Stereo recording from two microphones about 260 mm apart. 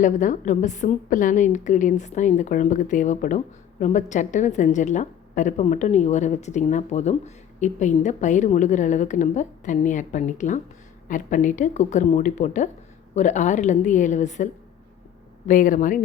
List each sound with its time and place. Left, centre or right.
0.0 s a woman's voice: left